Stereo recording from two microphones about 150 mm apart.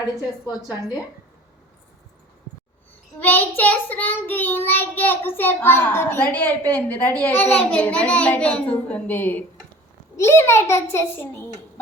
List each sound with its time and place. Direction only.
3.2 s child singing: 10° left (ahead or behind)